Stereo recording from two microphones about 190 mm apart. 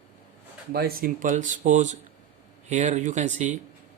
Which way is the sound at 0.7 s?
55° right (ahead or behind).